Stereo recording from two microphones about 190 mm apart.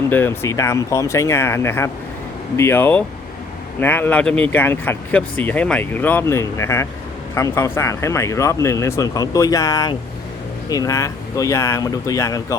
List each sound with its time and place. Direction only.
0.1 s speech: 10° left (ahead or behind)